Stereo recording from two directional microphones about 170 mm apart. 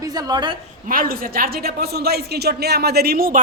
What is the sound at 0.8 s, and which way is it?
A woman's voice, 55° right (ahead or behind).